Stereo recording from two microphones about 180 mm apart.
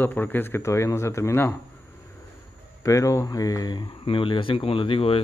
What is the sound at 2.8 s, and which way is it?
Speech, 20° left (ahead or behind).